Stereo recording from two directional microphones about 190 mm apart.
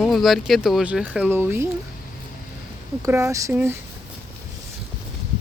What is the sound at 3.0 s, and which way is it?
Speech, 15° right (ahead or behind).